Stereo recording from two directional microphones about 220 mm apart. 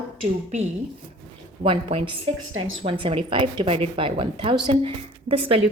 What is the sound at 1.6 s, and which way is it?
A woman's voice, 25° right (ahead or behind).